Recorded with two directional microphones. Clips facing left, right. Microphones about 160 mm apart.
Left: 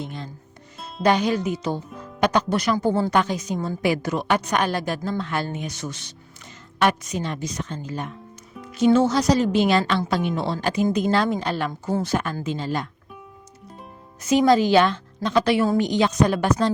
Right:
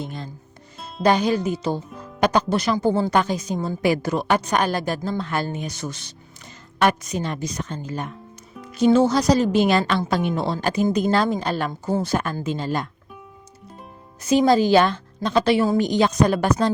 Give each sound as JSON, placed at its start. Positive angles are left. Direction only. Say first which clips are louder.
{"t": 0.0, "sound": "a woman's voice", "louder": "right 1 dB", "side_deg": -40}
{"t": 14.2, "sound": "a woman's voice", "louder": "even", "side_deg": -30}
{"t": 15.9, "sound": "a woman's voice", "louder": "right 1 dB", "side_deg": -40}